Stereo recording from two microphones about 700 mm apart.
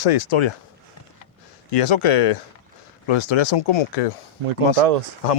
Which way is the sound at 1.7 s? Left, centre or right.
Left.